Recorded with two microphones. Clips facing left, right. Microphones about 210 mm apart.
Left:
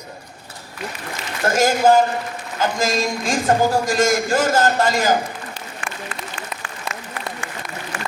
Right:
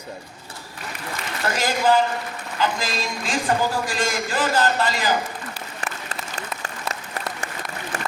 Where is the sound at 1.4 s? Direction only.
45° left (ahead or behind).